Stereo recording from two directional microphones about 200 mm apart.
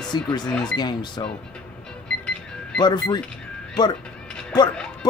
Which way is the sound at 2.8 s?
20° left (ahead or behind).